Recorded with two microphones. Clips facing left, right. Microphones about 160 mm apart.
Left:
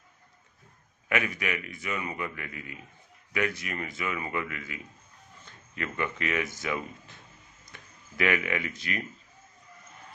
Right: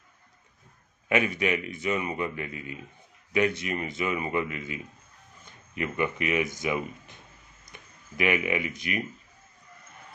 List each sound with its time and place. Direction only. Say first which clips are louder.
1.0 s speech: right 5 dB; 25° right (ahead or behind)